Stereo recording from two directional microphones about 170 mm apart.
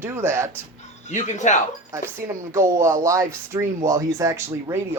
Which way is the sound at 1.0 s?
45° left (ahead or behind).